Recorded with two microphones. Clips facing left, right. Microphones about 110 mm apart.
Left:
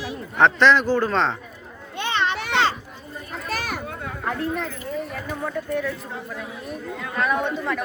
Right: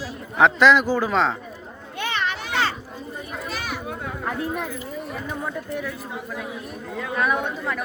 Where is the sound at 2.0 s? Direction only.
25° left (ahead or behind).